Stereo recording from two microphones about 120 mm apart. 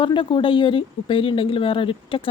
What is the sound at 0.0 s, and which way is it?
Speech, 45° left (ahead or behind).